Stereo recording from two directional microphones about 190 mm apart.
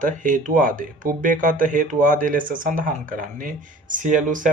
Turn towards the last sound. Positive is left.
turn(degrees=-45)  # may be behind; listen again after turning